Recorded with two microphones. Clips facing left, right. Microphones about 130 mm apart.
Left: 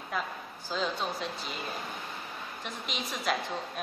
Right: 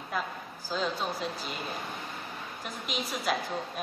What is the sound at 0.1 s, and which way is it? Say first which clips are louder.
A woman's voice: right 1 dB; centre (ahead or behind).